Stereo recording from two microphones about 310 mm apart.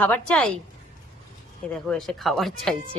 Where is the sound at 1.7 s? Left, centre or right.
Centre.